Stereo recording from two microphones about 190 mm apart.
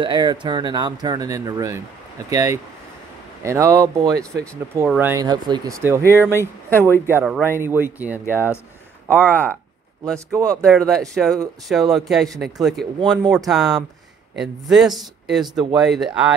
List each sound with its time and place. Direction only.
0.0 s speech: 25° right (ahead or behind); by 5.1 s 5° right (ahead or behind)
5.1 s speech: 20° right (ahead or behind)
6.7 s speech: 10° left (ahead or behind)
7.4 s speech: 10° right (ahead or behind)
9.1 s speech: 10° left (ahead or behind)